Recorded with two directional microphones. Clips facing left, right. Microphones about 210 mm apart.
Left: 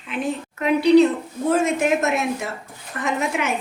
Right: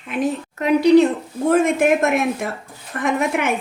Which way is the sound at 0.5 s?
40° right (ahead or behind).